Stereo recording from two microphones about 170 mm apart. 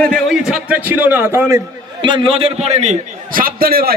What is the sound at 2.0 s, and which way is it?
Speech, 30° right (ahead or behind).